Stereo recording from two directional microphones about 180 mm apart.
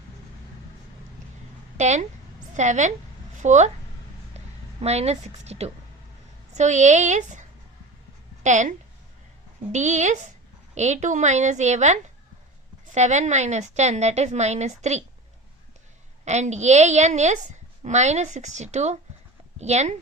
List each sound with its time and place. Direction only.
1.8 s a woman's voice: 40° right (ahead or behind)
8.4 s a woman's voice: 40° right (ahead or behind)
9.7 s a woman's voice: 40° right (ahead or behind)
16.2 s a woman's voice: 40° right (ahead or behind)